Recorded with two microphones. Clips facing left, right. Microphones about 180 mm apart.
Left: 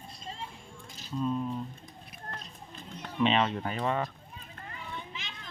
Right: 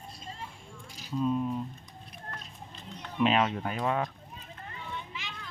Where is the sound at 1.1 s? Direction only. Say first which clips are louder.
Right 2 dB; 10° right (ahead or behind).